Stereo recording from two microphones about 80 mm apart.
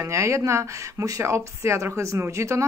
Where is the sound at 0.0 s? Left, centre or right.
Right.